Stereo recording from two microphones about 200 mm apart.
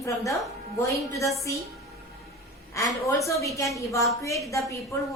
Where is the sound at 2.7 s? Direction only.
15° left (ahead or behind).